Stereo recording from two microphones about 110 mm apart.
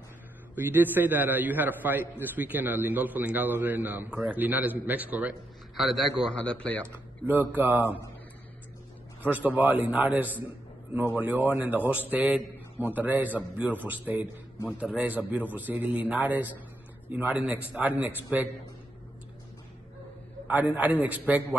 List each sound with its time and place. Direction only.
0.6 s a man's voice: 20° right (ahead or behind)
5.8 s a man's voice: centre (ahead or behind)
6.3 s speech: 10° left (ahead or behind)
7.2 s a man's voice: 15° right (ahead or behind)
9.2 s a man's voice: 15° right (ahead or behind)
20.4 s a man's voice: 15° right (ahead or behind)